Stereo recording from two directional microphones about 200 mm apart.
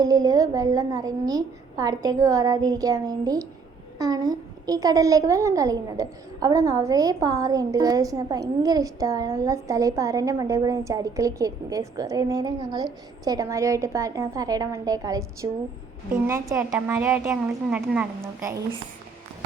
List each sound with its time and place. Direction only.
0.0 s a child's voice: 15° right (ahead or behind)